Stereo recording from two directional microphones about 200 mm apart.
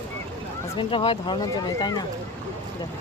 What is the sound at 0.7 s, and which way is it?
Speech, 25° left (ahead or behind).